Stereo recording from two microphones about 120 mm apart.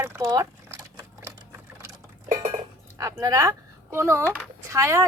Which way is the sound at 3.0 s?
30° right (ahead or behind).